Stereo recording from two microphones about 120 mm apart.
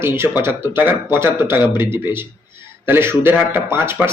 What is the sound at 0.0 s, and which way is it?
A man's voice, 20° right (ahead or behind).